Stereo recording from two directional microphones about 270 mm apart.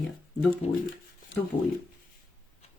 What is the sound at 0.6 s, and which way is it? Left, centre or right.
Speech, left.